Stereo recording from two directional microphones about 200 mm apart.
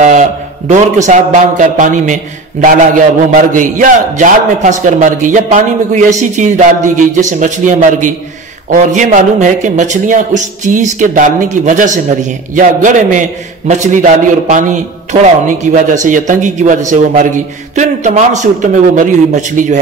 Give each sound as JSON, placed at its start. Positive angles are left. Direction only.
{"t": 0.7, "sound": "a man's voice", "side_deg": -35}